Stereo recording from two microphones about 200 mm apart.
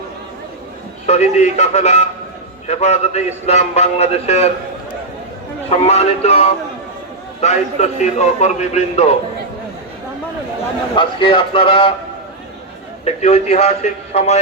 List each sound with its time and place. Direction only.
1.0 s a man's voice: 35° left (ahead or behind)
10.9 s speech: 25° left (ahead or behind)
13.1 s a man's voice: 30° left (ahead or behind)